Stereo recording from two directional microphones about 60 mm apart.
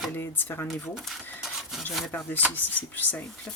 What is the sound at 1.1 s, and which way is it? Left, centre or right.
Speech, centre.